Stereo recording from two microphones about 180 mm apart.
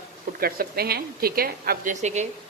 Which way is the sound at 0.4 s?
55° right (ahead or behind).